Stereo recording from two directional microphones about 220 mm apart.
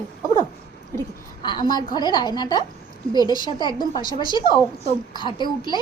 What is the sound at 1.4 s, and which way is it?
A woman's voice, 20° left (ahead or behind).